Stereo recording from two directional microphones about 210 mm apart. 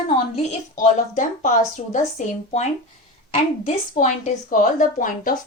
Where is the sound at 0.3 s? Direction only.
35° left (ahead or behind).